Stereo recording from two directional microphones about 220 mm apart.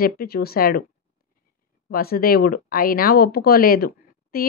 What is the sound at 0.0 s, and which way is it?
Speech, 45° left (ahead or behind).